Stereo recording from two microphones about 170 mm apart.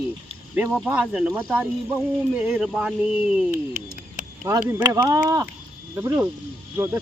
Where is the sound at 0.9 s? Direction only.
10° right (ahead or behind).